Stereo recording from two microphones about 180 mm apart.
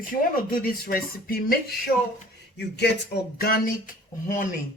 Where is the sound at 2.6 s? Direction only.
70° left (ahead or behind).